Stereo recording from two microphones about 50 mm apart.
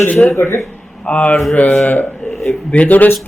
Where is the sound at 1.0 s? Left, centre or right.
Left.